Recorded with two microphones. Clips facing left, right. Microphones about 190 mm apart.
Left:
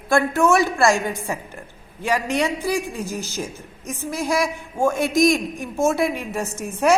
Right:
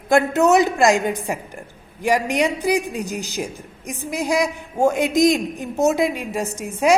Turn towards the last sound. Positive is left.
turn(degrees=-15)  # may be behind; listen again after turning